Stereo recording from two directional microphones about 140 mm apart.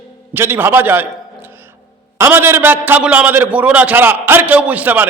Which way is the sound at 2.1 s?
15° right (ahead or behind).